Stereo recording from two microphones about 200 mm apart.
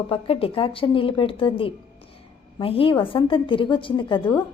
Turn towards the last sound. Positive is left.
turn(degrees=25)  # may be behind; listen again after turning